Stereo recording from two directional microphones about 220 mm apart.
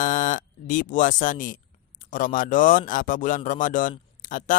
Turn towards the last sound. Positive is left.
turn(degrees=35)  # may be behind; listen again after turning